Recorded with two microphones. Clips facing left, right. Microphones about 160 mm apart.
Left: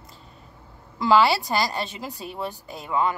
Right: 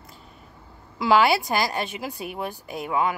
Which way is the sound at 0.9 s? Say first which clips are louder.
Even; 10° right (ahead or behind).